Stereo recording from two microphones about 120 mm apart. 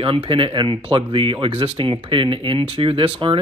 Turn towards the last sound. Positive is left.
turn(degrees=-50)  # may be behind; listen again after turning